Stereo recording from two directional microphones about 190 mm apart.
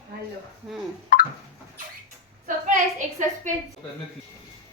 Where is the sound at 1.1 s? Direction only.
45° left (ahead or behind).